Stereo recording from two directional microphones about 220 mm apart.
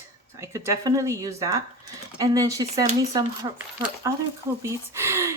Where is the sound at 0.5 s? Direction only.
15° right (ahead or behind).